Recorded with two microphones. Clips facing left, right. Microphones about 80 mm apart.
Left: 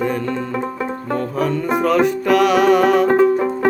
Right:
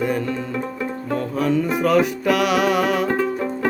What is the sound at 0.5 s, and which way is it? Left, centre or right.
Banjo, left.